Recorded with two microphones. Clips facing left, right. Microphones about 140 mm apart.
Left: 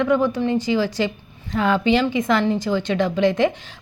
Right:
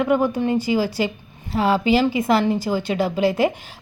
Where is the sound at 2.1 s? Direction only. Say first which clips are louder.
Right 1 dB; 5° right (ahead or behind).